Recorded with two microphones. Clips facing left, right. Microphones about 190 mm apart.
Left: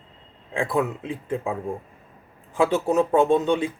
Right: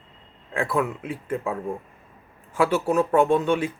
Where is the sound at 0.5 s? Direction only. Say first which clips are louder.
Left 1 dB; 15° left (ahead or behind).